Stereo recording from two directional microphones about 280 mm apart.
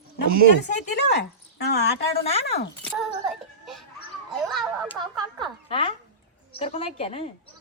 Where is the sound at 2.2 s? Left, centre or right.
Left.